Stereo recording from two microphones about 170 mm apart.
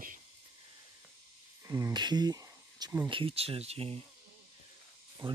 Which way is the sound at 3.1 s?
30° right (ahead or behind).